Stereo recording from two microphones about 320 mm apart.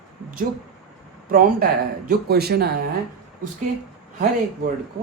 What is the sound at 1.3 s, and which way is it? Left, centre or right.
Speech, right.